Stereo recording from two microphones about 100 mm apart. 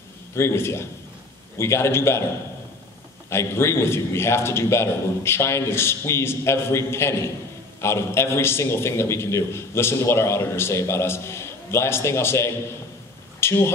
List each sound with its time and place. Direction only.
0.4 s a man's voice: 25° left (ahead or behind)
3.3 s a man's voice: 25° left (ahead or behind)